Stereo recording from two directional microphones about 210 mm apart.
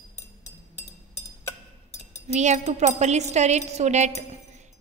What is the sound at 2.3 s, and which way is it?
A woman's voice, 35° right (ahead or behind).